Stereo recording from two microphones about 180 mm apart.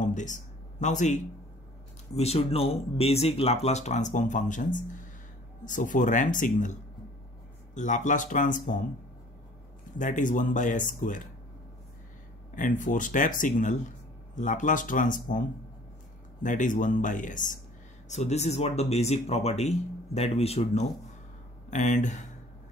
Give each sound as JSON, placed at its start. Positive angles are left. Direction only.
{"t": 0.0, "sound": "speech", "side_deg": 45}
{"t": 9.9, "sound": "speech", "side_deg": 45}
{"t": 12.5, "sound": "speech", "side_deg": 45}
{"t": 16.4, "sound": "speech", "side_deg": 45}